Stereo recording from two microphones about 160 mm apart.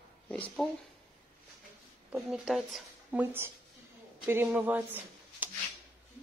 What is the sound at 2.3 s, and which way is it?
Speech, centre (ahead or behind).